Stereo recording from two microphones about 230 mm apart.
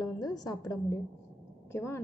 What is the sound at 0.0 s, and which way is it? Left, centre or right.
A woman's voice, centre.